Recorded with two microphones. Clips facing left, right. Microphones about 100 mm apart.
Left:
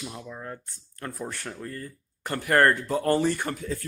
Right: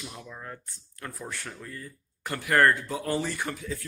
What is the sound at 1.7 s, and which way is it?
Speech, 50° left (ahead or behind).